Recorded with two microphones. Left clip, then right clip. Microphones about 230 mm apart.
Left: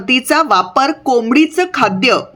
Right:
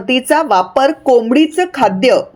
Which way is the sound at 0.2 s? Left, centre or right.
Centre.